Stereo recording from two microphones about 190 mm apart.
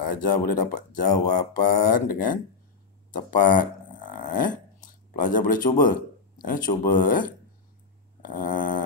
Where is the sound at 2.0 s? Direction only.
45° left (ahead or behind).